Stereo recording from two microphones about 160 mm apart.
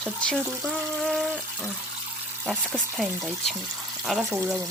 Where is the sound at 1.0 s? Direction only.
5° right (ahead or behind).